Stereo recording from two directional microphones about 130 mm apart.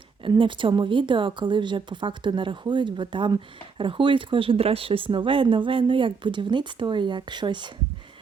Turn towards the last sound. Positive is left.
turn(degrees=-35)  # may be behind; listen again after turning